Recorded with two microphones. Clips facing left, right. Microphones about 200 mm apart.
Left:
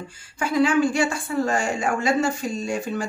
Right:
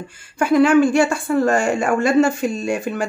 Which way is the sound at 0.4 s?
60° right (ahead or behind).